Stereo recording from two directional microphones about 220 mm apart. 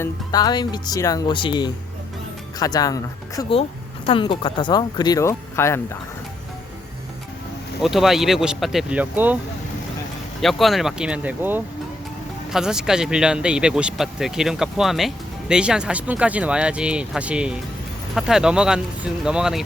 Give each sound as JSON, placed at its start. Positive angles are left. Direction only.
{"t": 0.0, "sound": "speech", "side_deg": 15}
{"t": 7.8, "sound": "speech", "side_deg": 0}
{"t": 10.4, "sound": "speech", "side_deg": 0}